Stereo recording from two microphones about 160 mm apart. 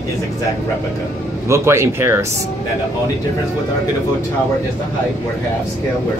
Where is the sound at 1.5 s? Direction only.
15° right (ahead or behind).